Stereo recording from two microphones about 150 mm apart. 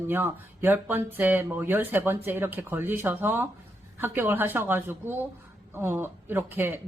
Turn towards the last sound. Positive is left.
turn(degrees=-15)  # may be behind; listen again after turning